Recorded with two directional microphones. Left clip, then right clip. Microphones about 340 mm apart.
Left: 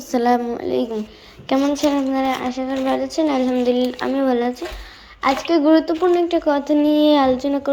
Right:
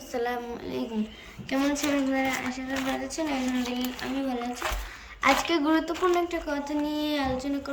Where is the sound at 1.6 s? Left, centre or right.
Centre.